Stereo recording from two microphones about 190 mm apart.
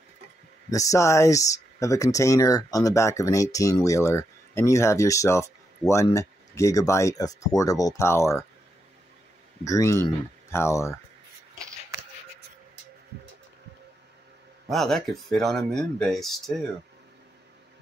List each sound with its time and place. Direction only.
0.7 s speech: 15° left (ahead or behind)
9.7 s speech: 15° left (ahead or behind)
14.7 s speech: centre (ahead or behind)